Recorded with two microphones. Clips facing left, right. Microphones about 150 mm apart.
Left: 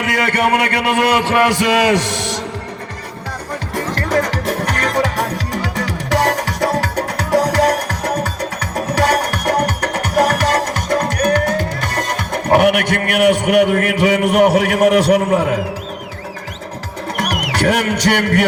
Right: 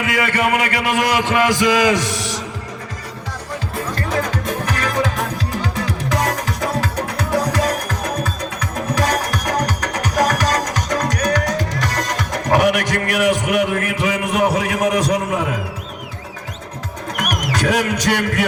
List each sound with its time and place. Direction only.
0.0 s a man's voice: 65° left (ahead or behind)
3.8 s music: 90° left; by 12.4 s 60° left (ahead or behind)
12.5 s a man's voice: 60° left (ahead or behind)
17.4 s a man's voice: 70° left (ahead or behind)